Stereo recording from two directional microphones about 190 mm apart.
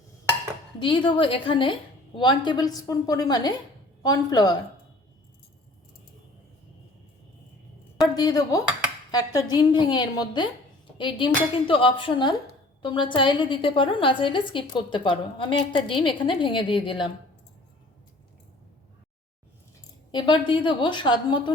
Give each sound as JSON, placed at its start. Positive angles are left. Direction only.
{"t": 0.8, "sound": "a woman's voice", "side_deg": 25}
{"t": 8.0, "sound": "a woman's voice", "side_deg": 20}
{"t": 20.1, "sound": "a woman's voice", "side_deg": 25}